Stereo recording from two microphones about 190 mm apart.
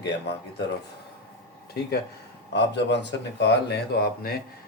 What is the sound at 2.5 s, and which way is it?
Speech, 65° left (ahead or behind).